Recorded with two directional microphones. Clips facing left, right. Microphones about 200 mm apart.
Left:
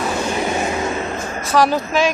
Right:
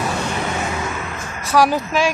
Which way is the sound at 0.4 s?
20° left (ahead or behind).